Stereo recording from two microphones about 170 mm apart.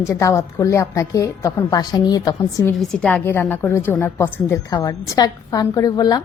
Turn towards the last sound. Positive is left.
turn(degrees=25)  # may be behind; listen again after turning